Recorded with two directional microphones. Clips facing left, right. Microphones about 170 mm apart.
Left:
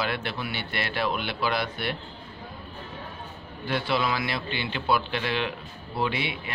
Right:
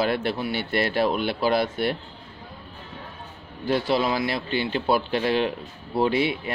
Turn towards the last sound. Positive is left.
turn(degrees=-40)  # may be behind; listen again after turning